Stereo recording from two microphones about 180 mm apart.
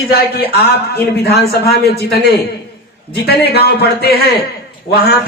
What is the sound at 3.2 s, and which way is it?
Speech, 60° left (ahead or behind).